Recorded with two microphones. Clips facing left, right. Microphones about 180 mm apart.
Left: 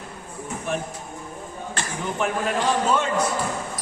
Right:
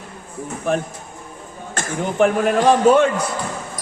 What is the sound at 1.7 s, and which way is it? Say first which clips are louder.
Speech: right 7 dB; 45° right (ahead or behind).